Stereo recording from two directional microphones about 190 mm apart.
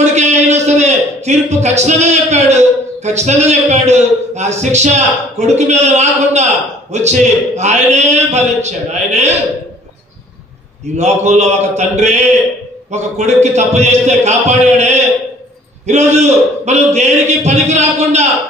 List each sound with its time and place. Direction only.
0.0 s a man's voice: 35° right (ahead or behind)
11.0 s a man's voice: 35° right (ahead or behind)
16.6 s a sound: 35° right (ahead or behind)